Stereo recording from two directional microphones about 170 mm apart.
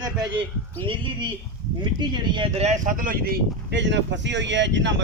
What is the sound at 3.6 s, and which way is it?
Speech, 90° right.